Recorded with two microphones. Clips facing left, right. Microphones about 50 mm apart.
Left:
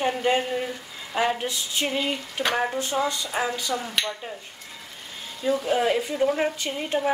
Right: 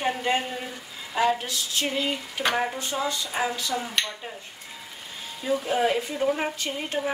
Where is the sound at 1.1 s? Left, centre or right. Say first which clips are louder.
Right 1 dB; centre.